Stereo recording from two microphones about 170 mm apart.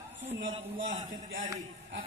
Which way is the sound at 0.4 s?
90° right.